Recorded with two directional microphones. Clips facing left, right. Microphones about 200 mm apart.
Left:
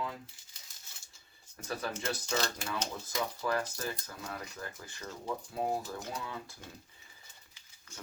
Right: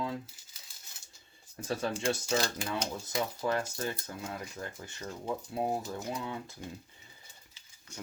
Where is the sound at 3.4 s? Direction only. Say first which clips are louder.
Right 1 dB; 25° right (ahead or behind).